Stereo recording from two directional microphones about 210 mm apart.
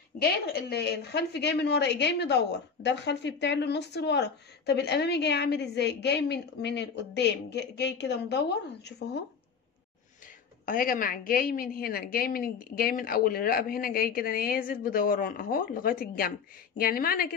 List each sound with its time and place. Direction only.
0.2 s a woman's voice: 50° left (ahead or behind)
10.6 s a woman's voice: 40° left (ahead or behind)